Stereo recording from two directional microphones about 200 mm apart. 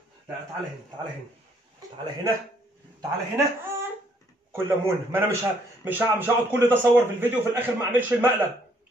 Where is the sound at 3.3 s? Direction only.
10° right (ahead or behind).